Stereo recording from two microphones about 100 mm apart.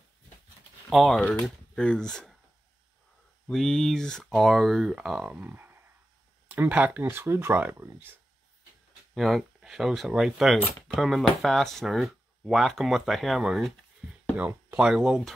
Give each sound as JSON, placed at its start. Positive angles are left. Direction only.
{"t": 0.8, "sound": "speech", "side_deg": 0}
{"t": 3.4, "sound": "speech", "side_deg": 5}
{"t": 5.3, "sound": "speech", "side_deg": -20}
{"t": 9.1, "sound": "speech", "side_deg": 0}
{"t": 14.3, "sound": "speech", "side_deg": -15}
{"t": 14.8, "sound": "speech", "side_deg": -5}